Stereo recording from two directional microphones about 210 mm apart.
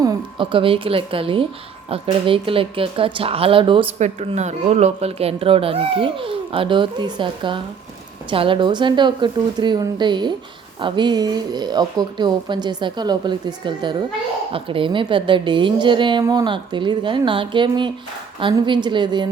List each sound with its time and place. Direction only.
0.0 s a woman's voice: 20° right (ahead or behind)